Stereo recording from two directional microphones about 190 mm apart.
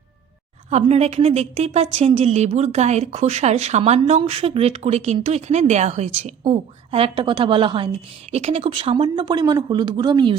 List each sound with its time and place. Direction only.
0.7 s a woman's voice: 35° right (ahead or behind)